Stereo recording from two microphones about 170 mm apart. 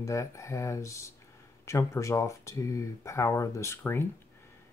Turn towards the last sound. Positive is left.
turn(degrees=15)  # may be behind; listen again after turning